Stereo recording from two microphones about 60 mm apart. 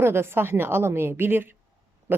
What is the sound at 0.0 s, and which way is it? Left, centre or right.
A woman's voice, right.